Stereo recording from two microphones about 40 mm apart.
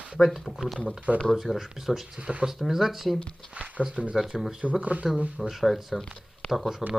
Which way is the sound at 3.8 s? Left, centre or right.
Right.